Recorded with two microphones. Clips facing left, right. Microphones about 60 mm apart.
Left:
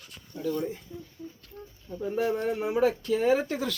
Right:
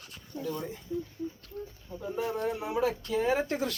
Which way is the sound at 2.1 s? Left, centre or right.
Left.